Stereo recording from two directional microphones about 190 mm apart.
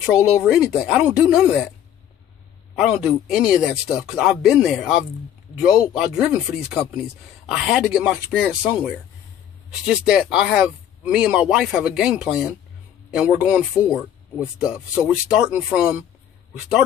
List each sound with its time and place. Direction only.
0.1 s speech: centre (ahead or behind)
2.7 s speech: 5° right (ahead or behind)
13.8 s speech: 15° left (ahead or behind)
14.6 s speech: 5° right (ahead or behind)